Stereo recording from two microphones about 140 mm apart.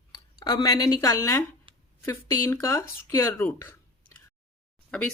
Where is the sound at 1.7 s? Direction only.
40° right (ahead or behind).